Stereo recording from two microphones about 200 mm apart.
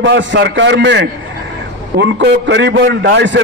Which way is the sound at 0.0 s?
65° right (ahead or behind).